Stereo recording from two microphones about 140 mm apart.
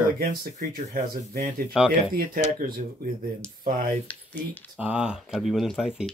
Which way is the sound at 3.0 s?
90° right.